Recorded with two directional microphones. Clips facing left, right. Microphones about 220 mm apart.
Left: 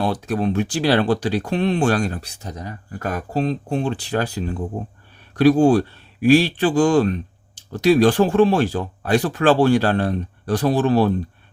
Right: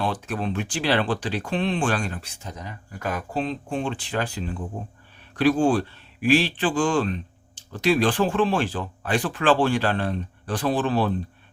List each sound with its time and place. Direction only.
0.0 s speech: 40° left (ahead or behind)